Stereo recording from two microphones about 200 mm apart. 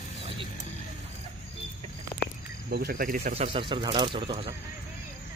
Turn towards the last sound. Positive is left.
turn(degrees=-25)  # may be behind; listen again after turning